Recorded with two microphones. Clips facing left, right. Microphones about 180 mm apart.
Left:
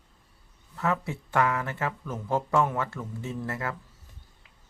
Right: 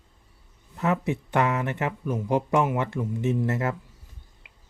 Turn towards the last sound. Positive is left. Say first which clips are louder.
# right 8 dB
turn(degrees=-20)  # may be behind; listen again after turning